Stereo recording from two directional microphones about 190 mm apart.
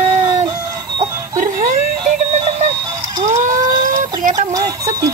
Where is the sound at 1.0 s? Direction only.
40° right (ahead or behind).